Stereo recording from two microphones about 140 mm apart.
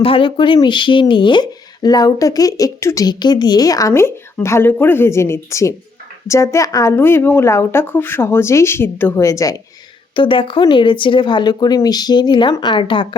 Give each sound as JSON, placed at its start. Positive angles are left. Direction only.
{"t": 0.0, "sound": "a woman's voice", "side_deg": 40}
{"t": 10.2, "sound": "speech", "side_deg": 40}